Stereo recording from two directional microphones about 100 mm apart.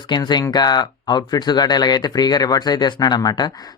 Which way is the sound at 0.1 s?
45° left (ahead or behind).